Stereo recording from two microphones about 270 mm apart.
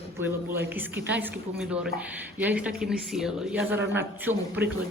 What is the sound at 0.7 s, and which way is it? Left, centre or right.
A woman's voice, centre.